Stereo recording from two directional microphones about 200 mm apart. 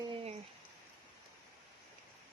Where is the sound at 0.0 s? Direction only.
25° right (ahead or behind).